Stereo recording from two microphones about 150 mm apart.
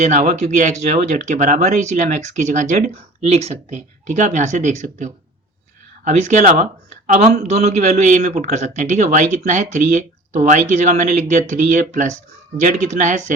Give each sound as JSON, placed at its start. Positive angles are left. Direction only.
{"t": 0.0, "sound": "speech", "side_deg": -55}